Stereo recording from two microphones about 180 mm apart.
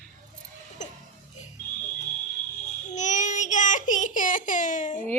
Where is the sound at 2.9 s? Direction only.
40° left (ahead or behind).